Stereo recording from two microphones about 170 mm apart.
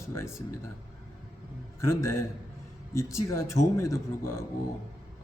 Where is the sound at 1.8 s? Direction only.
15° left (ahead or behind).